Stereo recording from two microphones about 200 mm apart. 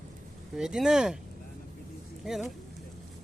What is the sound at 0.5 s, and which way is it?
Speech, centre (ahead or behind).